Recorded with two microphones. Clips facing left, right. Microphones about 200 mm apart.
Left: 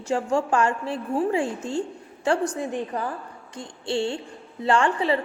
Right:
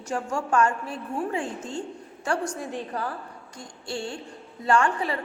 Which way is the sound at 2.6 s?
20° left (ahead or behind).